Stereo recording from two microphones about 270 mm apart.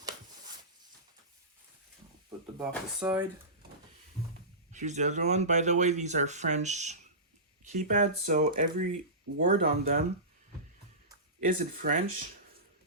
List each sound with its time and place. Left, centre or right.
2.6 s speech: centre
4.7 s speech: right
11.4 s speech: right